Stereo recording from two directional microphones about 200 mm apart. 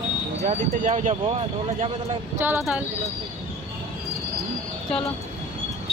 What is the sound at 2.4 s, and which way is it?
Speech, 10° right (ahead or behind).